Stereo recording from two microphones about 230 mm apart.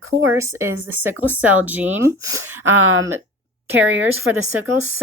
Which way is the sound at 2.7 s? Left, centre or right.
Right.